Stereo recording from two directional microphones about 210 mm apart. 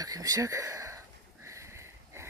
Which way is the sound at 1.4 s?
15° right (ahead or behind).